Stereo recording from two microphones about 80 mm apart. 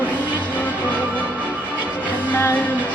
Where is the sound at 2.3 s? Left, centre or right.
Left.